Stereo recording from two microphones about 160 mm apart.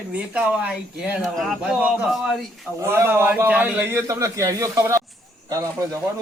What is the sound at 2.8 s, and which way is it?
A man's voice, 15° right (ahead or behind).